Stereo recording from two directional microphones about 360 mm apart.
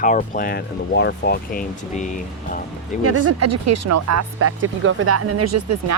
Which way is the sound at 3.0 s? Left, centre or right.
Right.